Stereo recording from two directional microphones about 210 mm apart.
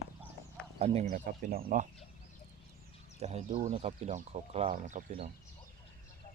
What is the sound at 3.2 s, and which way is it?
Speech, 30° right (ahead or behind).